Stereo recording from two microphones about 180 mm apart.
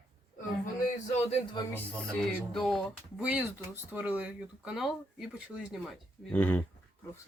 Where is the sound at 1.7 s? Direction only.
5° left (ahead or behind).